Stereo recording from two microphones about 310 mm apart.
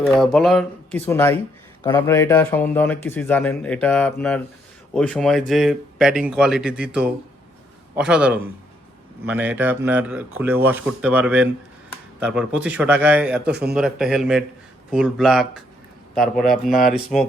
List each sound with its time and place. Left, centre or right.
0.0 s speech: centre
13.4 s speech: right
13.7 s speech: centre